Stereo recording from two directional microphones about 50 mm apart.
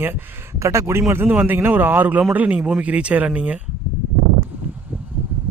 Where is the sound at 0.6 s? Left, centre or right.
Right.